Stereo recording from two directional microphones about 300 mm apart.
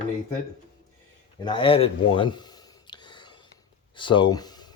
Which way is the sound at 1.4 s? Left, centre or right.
Centre.